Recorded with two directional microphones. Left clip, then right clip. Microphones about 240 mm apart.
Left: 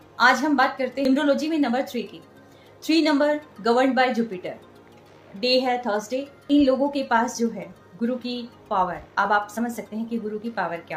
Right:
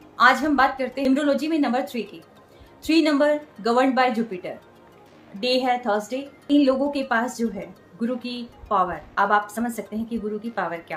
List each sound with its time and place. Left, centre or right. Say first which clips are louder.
0.2 s speech: right 1 dB; centre